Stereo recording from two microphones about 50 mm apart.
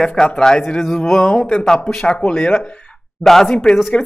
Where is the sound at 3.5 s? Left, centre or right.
Centre.